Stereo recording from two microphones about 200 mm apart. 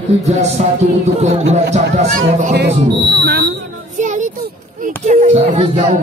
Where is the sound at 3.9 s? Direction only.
40° right (ahead or behind).